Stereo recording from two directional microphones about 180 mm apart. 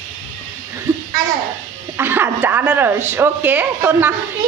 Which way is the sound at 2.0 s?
10° right (ahead or behind).